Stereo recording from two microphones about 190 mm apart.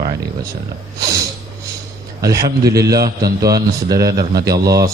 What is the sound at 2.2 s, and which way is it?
A man's voice, 20° right (ahead or behind).